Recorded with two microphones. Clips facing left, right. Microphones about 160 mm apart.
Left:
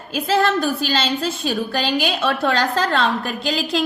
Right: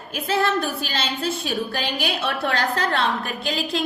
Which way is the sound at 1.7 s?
90° left.